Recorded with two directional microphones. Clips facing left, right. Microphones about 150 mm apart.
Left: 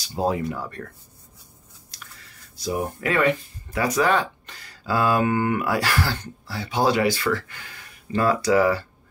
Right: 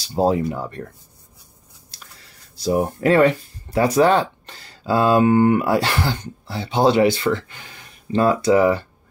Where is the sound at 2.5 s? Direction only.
30° right (ahead or behind).